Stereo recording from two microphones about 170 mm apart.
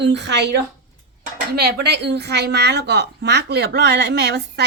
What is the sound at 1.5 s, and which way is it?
A woman's voice, 70° right (ahead or behind).